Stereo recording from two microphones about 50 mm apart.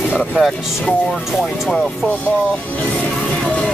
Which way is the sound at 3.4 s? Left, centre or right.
Left.